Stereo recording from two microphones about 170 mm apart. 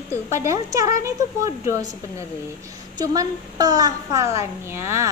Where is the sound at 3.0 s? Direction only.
20° right (ahead or behind).